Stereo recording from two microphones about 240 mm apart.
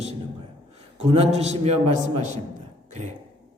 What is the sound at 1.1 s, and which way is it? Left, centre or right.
A man's voice, right.